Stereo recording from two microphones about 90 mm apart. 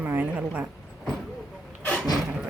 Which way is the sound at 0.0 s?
20° right (ahead or behind).